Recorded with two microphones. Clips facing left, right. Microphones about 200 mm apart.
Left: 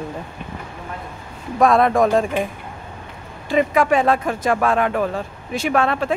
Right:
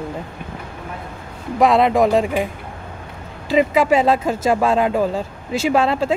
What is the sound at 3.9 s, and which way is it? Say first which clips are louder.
Speech: right 2 dB; 25° right (ahead or behind).